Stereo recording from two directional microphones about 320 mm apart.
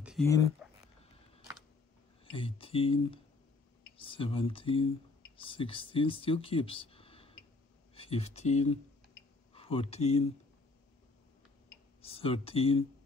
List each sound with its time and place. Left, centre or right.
0.0 s a sound: centre
2.2 s speech: centre
12.0 s speech: centre